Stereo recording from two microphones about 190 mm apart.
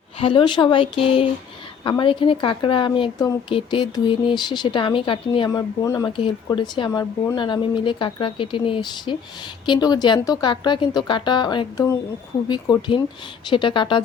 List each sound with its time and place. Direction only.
0.2 s speech: 25° left (ahead or behind)
5.5 s speech: 15° left (ahead or behind)